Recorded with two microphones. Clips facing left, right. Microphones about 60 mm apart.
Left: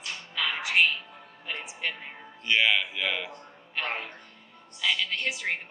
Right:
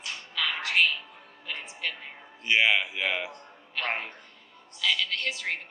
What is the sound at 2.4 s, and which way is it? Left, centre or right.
Speech, centre.